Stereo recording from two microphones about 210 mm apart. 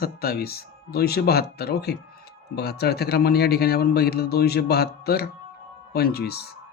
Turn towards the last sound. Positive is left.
turn(degrees=50)  # may be behind; listen again after turning